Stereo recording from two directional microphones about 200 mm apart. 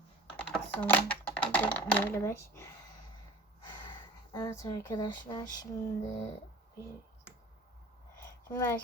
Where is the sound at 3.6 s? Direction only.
25° left (ahead or behind).